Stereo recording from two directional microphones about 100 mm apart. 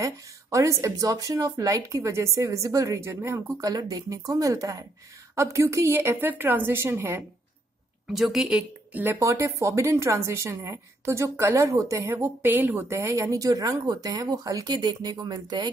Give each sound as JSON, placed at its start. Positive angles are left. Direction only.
{"t": 0.0, "sound": "speech", "side_deg": -30}
{"t": 8.1, "sound": "speech", "side_deg": -5}